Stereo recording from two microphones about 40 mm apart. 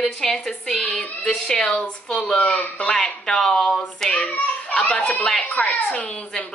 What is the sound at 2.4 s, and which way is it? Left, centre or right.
Speech, left.